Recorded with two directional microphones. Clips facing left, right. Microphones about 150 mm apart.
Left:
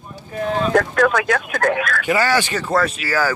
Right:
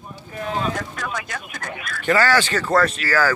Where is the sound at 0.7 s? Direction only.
75° left (ahead or behind).